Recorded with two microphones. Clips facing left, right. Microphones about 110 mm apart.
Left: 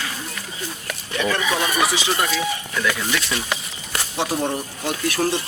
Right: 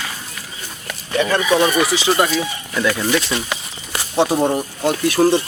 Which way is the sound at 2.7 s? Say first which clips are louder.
Right 7 dB; 25° right (ahead or behind).